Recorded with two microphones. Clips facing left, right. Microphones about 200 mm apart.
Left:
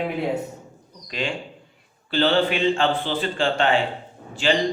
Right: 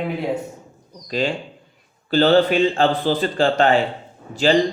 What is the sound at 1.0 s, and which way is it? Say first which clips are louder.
Speech: right 6 dB; 35° right (ahead or behind).